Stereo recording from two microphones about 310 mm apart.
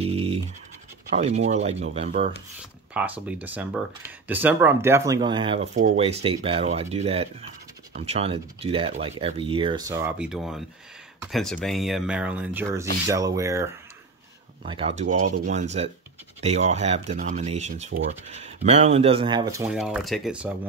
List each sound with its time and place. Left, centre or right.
0.0 s scratch: centre
1.1 s speech: right
2.9 s speech: centre